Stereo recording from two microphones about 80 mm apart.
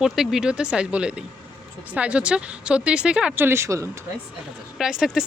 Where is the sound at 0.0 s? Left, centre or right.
Centre.